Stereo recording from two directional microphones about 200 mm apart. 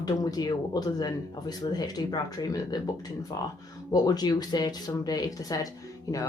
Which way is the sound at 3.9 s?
20° left (ahead or behind).